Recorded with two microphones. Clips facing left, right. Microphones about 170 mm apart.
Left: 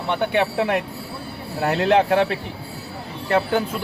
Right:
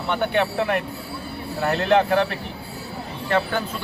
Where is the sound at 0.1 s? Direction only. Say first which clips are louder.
Left 1 dB; 20° left (ahead or behind).